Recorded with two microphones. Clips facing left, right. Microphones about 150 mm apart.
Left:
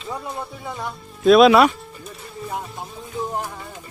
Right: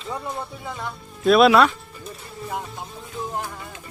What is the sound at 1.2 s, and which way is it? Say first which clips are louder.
Speech: left 3 dB; centre (ahead or behind).